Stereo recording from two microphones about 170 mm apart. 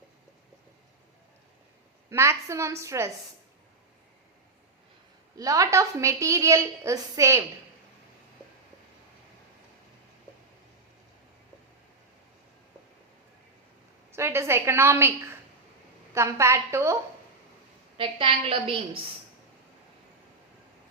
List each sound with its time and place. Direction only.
2.0 s a woman's voice: 15° right (ahead or behind)
5.4 s a woman's voice: 20° right (ahead or behind)
14.2 s a woman's voice: 15° right (ahead or behind)
17.9 s a woman's voice: 30° right (ahead or behind)